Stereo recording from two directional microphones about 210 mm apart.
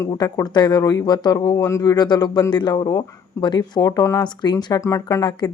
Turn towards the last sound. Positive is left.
turn(degrees=15)  # may be behind; listen again after turning